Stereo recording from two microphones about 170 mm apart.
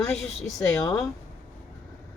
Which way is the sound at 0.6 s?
15° left (ahead or behind).